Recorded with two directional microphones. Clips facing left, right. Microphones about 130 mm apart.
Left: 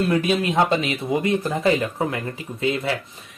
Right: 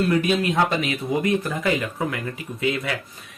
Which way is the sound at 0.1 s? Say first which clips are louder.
Even; 20° left (ahead or behind).